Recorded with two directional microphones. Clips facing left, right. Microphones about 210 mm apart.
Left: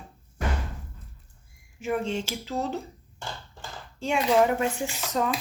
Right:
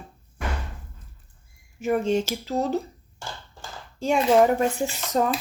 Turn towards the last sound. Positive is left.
turn(degrees=-40)  # may be behind; listen again after turning